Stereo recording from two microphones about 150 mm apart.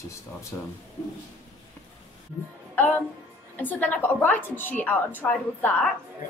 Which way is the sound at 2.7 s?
10° left (ahead or behind).